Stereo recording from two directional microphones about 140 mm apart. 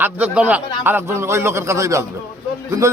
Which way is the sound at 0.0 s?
10° right (ahead or behind).